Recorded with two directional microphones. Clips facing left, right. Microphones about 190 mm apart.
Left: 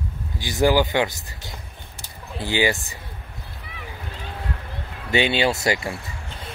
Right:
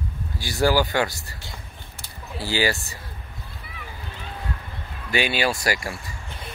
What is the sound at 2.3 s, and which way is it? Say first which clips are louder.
Speech: left 2 dB; 20° left (ahead or behind).